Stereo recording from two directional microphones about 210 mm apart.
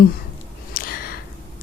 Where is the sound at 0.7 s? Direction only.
45° left (ahead or behind).